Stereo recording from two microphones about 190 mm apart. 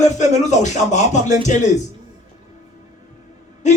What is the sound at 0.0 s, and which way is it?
Speech, 40° left (ahead or behind).